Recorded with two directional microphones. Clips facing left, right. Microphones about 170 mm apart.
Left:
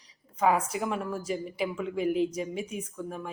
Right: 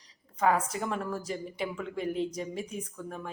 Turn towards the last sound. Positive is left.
turn(degrees=5)  # may be behind; listen again after turning